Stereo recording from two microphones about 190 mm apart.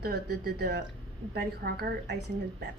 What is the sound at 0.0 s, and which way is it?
A woman's voice, 55° right (ahead or behind).